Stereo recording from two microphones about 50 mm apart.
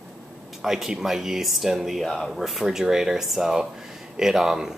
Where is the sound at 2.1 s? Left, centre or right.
Centre.